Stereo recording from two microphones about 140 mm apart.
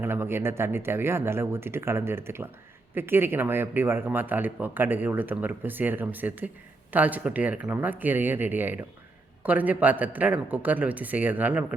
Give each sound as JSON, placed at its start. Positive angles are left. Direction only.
{"t": 0.0, "sound": "speech", "side_deg": -15}